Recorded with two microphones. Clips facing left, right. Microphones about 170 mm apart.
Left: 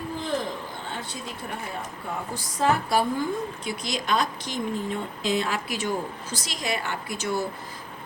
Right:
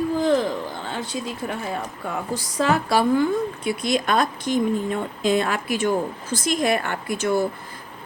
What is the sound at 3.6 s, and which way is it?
A woman's voice, 55° right (ahead or behind).